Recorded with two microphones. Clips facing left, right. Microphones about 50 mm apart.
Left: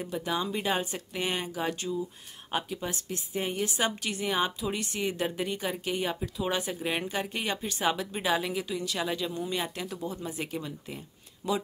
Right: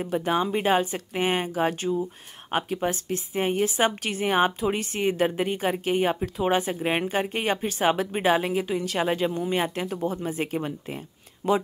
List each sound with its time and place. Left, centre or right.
0.1 s speech: right
6.4 s speech: right